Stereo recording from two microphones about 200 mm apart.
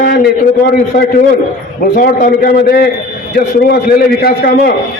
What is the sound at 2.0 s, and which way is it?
A man's voice, 45° left (ahead or behind).